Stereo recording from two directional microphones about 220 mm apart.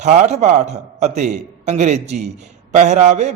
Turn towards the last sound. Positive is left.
turn(degrees=-30)  # may be behind; listen again after turning